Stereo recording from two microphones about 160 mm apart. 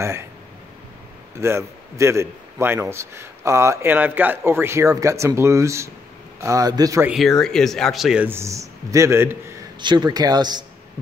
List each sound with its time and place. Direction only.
0.0 s a man's voice: 15° right (ahead or behind)
1.3 s a man's voice: 15° right (ahead or behind)
7.1 s speech: centre (ahead or behind); by 9.4 s 15° right (ahead or behind)
9.8 s speech: 30° right (ahead or behind)